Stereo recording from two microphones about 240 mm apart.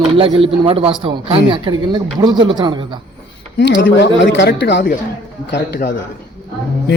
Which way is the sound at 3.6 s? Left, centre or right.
Left.